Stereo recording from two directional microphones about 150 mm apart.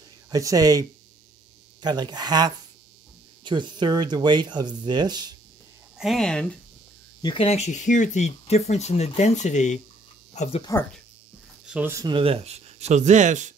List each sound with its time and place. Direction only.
0.3 s speech: 25° right (ahead or behind)
5.9 s speech: centre (ahead or behind)
7.2 s speech: 30° left (ahead or behind)
7.4 s speech: 50° left (ahead or behind)
11.6 s a sound: 10° right (ahead or behind)
11.9 s speech: 25° right (ahead or behind)
12.2 s speech: 40° right (ahead or behind)